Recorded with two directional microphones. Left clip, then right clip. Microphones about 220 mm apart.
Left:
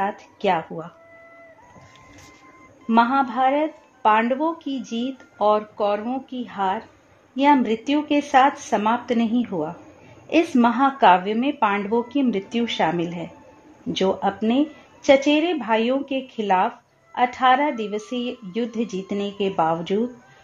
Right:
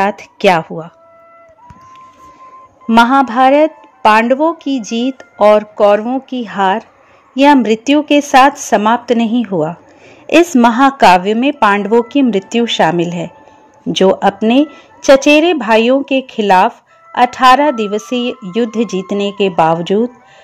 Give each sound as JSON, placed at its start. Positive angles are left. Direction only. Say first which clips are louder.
{"t": 0.0, "sound": "speech", "louder": "right 12 dB", "side_deg": -35}
{"t": 2.9, "sound": "speech", "louder": "right 9 dB", "side_deg": -35}